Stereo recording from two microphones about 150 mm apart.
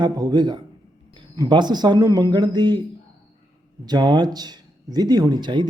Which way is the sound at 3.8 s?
30° right (ahead or behind).